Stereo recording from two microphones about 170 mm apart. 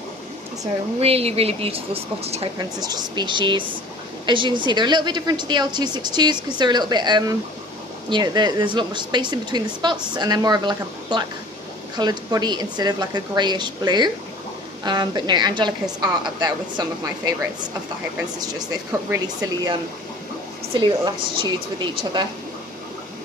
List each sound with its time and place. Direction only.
1.0 s a woman's voice: 35° right (ahead or behind)
2.8 s a woman's voice: 25° right (ahead or behind)
18.4 s a woman's voice: 20° right (ahead or behind)